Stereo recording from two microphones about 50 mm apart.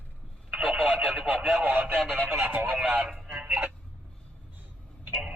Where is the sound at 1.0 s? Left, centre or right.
Right.